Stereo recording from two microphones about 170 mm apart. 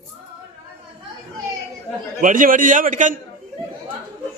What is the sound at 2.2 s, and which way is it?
Speech, 50° right (ahead or behind).